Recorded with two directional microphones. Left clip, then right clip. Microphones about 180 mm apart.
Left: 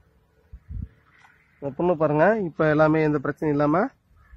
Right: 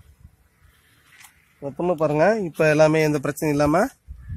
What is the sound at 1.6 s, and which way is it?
Speech, 10° right (ahead or behind).